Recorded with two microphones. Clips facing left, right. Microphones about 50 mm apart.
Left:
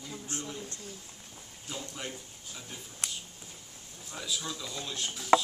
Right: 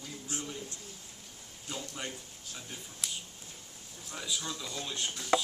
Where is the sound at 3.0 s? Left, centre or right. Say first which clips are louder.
Left 1 dB; left.